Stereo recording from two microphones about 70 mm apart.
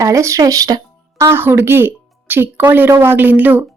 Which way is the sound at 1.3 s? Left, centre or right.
Right.